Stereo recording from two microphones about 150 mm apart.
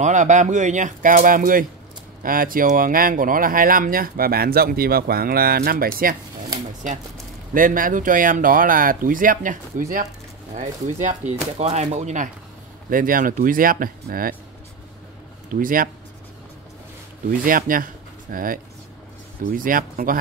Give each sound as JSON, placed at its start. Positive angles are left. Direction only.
{"t": 0.0, "sound": "speech", "side_deg": -55}
{"t": 7.5, "sound": "speech", "side_deg": -65}
{"t": 10.5, "sound": "speech", "side_deg": -50}
{"t": 12.9, "sound": "speech", "side_deg": -65}
{"t": 15.6, "sound": "speech", "side_deg": -70}
{"t": 17.3, "sound": "speech", "side_deg": -65}